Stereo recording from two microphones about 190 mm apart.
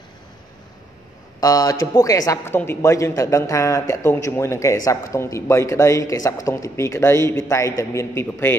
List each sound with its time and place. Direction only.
1.4 s a man's voice: 20° left (ahead or behind)